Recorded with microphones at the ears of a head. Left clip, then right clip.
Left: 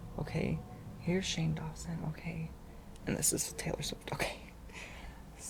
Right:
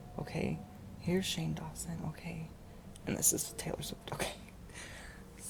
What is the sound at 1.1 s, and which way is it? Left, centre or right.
Speech, centre.